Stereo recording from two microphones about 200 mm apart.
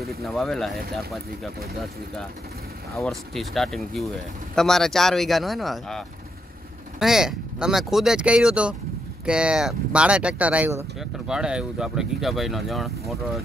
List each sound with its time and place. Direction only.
0.2 s speech: centre (ahead or behind)
3.0 s speech: centre (ahead or behind)